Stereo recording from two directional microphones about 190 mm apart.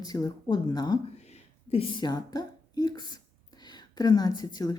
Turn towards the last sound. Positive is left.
turn(degrees=20)  # may be behind; listen again after turning